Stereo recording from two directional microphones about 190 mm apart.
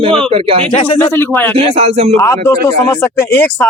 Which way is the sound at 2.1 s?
15° left (ahead or behind).